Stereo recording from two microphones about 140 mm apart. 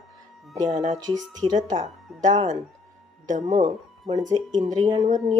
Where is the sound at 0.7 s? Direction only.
65° right (ahead or behind).